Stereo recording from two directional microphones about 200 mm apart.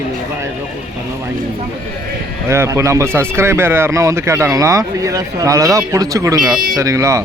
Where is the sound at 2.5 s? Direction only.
15° right (ahead or behind).